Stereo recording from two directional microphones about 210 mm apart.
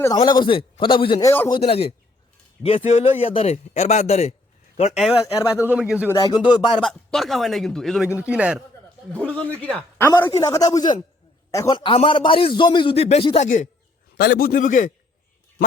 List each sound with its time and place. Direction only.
0.0 s a man's voice: 20° left (ahead or behind)
1.3 s speech: 10° left (ahead or behind)
1.5 s a man's voice: 25° left (ahead or behind)
5.2 s speech: 15° left (ahead or behind)
5.5 s a man's voice: 5° right (ahead or behind)
6.1 s a man's voice: 20° left (ahead or behind)
6.8 s a man's voice: centre (ahead or behind)
9.1 s a man's voice: 5° left (ahead or behind); by 14.9 s 40° left (ahead or behind)